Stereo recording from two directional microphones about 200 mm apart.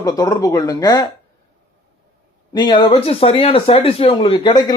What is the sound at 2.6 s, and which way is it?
Speech, 20° left (ahead or behind).